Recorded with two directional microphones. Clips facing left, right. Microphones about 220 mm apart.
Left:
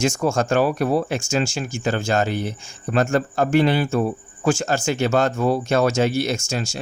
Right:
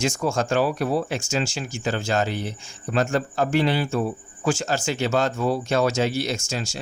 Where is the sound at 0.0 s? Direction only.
50° left (ahead or behind).